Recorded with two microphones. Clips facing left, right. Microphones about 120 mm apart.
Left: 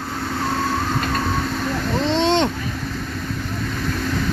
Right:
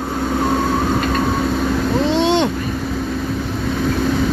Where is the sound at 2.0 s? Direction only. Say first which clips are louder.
Right 1 dB; 5° right (ahead or behind).